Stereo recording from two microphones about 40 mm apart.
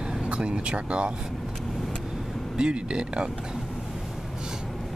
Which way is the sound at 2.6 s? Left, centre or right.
Right.